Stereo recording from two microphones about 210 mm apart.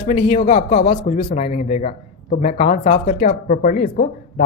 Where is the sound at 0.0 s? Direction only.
30° left (ahead or behind).